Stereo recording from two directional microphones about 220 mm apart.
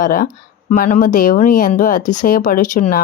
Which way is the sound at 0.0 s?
40° left (ahead or behind).